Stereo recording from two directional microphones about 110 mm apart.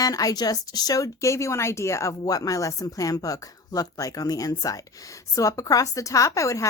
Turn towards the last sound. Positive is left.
turn(degrees=30)  # may be behind; listen again after turning